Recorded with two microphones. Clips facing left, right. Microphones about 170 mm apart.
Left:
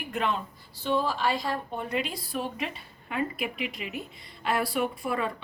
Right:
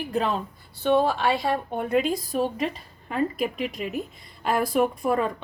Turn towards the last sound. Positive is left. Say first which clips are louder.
# right 6 dB
turn(degrees=-45)  # may be behind; listen again after turning